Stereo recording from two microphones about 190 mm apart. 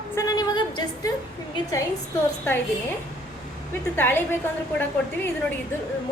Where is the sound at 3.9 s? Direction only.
10° left (ahead or behind).